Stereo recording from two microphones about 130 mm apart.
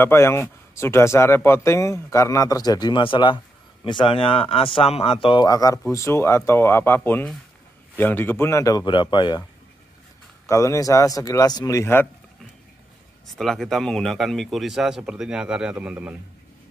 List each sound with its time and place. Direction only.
0.0 s speech: 20° left (ahead or behind); by 5.4 s 45° left (ahead or behind)
5.4 s speech: 30° left (ahead or behind)
10.5 s speech: 25° left (ahead or behind)
13.4 s a man's voice: centre (ahead or behind)